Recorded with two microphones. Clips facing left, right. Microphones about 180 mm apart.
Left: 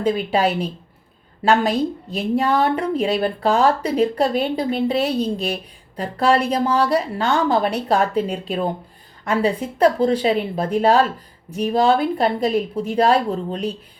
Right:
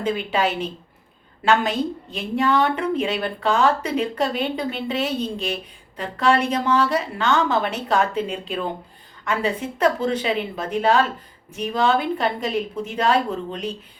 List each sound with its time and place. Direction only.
0.0 s a woman's voice: 35° left (ahead or behind)